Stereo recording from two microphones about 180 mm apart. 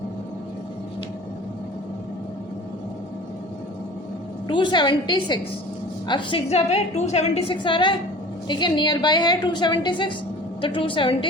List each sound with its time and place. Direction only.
4.4 s a woman's voice: 25° left (ahead or behind)